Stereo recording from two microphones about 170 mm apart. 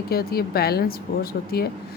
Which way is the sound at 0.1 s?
65° left (ahead or behind).